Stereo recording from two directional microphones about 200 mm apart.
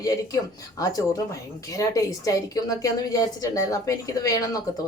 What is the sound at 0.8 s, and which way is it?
A woman's voice, 20° left (ahead or behind).